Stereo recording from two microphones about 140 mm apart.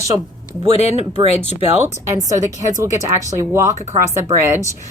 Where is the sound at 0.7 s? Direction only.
50° left (ahead or behind).